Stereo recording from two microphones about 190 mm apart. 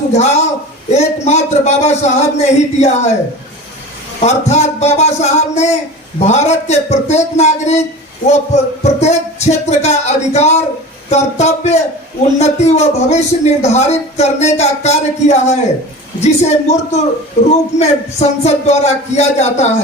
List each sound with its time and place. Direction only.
0.1 s a man's voice: 35° left (ahead or behind)
4.2 s a man's voice: 35° left (ahead or behind)